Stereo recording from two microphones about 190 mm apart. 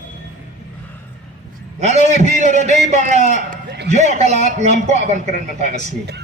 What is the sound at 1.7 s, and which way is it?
A man's voice, 35° right (ahead or behind).